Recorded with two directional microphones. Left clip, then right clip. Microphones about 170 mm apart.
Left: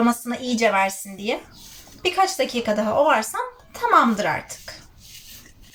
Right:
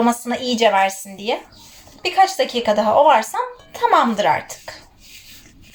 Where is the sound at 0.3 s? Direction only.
20° left (ahead or behind).